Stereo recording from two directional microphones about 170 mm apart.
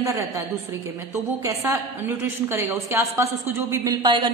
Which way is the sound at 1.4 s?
20° right (ahead or behind).